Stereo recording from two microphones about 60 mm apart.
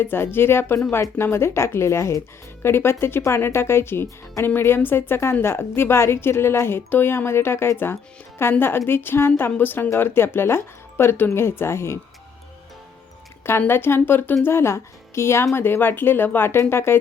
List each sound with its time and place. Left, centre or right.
0.0 s a woman's voice: left
13.6 s a woman's voice: left
14.4 s a woman's voice: left